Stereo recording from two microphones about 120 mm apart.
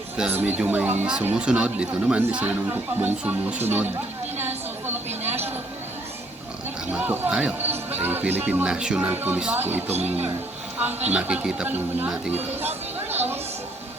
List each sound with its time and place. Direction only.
0.2 s speech: 15° right (ahead or behind)
6.9 s speech: 15° right (ahead or behind)
13.1 s a sound: 15° right (ahead or behind)